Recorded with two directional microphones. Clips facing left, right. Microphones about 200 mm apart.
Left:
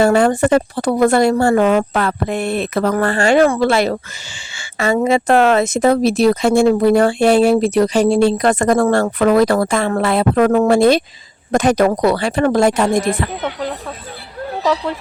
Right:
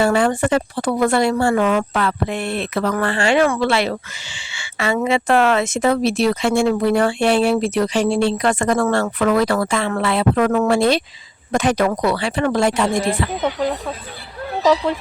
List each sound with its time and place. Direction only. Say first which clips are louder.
0.0 s speech: left 4 dB; 45° left (ahead or behind)
4.5 s a sound: left 4 dB; 45° left (ahead or behind)
4.9 s speech: left 3 dB; 40° left (ahead or behind)
13.4 s speech: right 2 dB; 5° right (ahead or behind)